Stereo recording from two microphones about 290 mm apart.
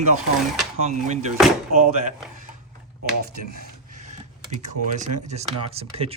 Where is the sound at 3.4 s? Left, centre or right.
Right.